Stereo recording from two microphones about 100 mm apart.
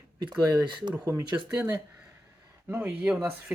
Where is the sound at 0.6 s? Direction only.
50° right (ahead or behind).